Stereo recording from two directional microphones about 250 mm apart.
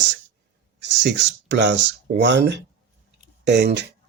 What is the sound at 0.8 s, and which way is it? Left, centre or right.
Speech, right.